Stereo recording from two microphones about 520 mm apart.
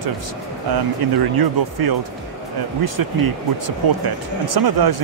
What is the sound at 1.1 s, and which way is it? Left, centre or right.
Speech, right.